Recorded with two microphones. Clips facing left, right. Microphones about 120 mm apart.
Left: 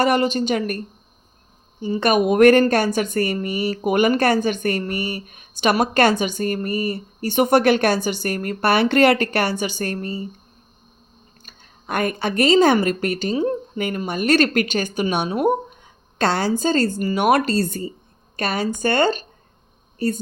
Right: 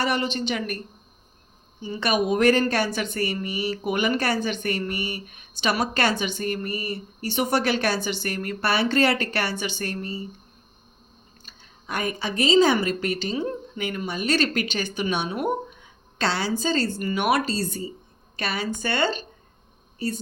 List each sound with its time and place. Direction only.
0.0 s a woman's voice: 45° left (ahead or behind)
2.0 s a woman's voice: 55° left (ahead or behind)
11.4 s a woman's voice: 55° left (ahead or behind)
17.0 s a woman's voice: 35° left (ahead or behind)